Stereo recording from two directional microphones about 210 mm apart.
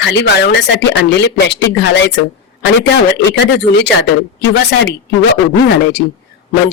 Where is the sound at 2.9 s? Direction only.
55° left (ahead or behind).